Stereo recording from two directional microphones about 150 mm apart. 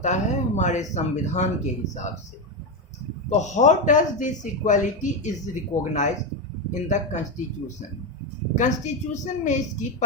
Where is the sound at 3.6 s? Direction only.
55° left (ahead or behind).